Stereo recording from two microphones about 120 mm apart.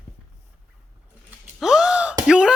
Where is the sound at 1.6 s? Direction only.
5° right (ahead or behind).